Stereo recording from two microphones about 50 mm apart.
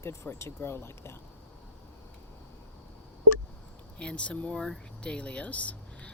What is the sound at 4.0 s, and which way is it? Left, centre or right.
Speech, left.